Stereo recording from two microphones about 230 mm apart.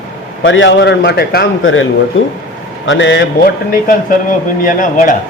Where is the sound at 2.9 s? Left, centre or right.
Left.